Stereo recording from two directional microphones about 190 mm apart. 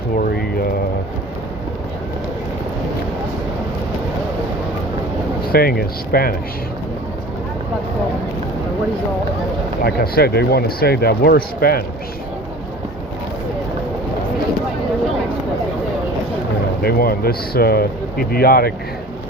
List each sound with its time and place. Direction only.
0.2 s a sound: 55° left (ahead or behind)
5.5 s speech: 50° left (ahead or behind)
9.8 s speech: 55° left (ahead or behind)
16.8 s speech: 55° left (ahead or behind)